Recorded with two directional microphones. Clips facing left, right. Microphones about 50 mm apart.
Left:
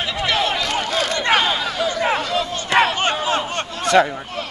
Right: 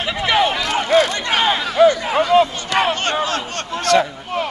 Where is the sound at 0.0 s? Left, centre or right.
Centre.